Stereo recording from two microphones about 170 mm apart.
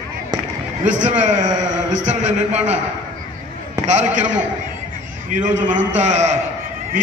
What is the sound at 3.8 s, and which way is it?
A man's voice, 45° right (ahead or behind).